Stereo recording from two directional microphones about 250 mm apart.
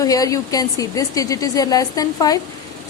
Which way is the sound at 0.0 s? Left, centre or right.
Centre.